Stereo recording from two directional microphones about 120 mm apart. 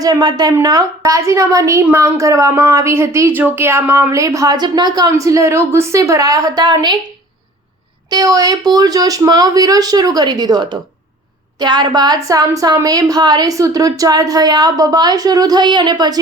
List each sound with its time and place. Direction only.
0.0 s a woman's voice: 35° right (ahead or behind)
8.1 s a woman's voice: 30° right (ahead or behind)